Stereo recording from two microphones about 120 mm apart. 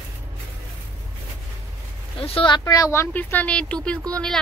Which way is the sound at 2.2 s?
50° left (ahead or behind).